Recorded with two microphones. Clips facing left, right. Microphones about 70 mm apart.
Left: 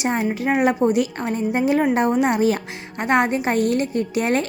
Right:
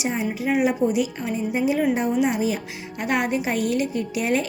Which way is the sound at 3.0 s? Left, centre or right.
Left.